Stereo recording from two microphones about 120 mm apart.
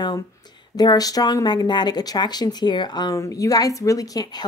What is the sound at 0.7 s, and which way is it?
A woman's voice, 30° left (ahead or behind).